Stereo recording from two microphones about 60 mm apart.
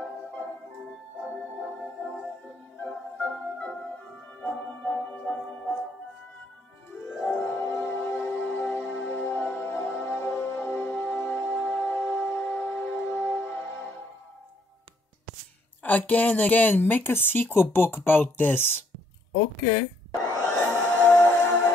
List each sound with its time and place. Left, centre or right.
0.0 s organ: left
2.4 s music: left
7.2 s music: left
15.8 s speech: left
20.2 s music: left